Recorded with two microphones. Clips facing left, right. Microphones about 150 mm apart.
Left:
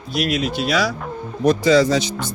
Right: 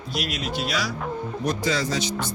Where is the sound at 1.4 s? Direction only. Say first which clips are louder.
Left 12 dB; 85° left.